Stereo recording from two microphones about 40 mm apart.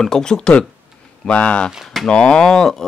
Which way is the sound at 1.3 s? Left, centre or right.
Left.